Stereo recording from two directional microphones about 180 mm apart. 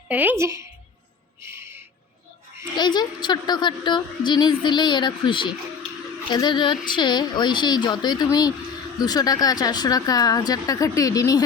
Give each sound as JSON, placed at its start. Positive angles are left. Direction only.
{"t": 0.1, "sound": "a woman's voice", "side_deg": -10}
{"t": 1.5, "sound": "owl", "side_deg": -15}
{"t": 2.7, "sound": "speech", "side_deg": 25}